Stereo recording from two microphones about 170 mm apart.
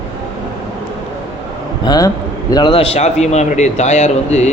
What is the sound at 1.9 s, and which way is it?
A man's voice, 20° left (ahead or behind).